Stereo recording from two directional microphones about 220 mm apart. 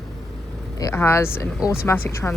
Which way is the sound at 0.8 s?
15° left (ahead or behind).